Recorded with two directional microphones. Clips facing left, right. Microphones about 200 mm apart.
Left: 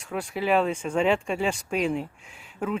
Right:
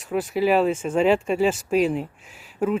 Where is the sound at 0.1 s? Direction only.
5° right (ahead or behind).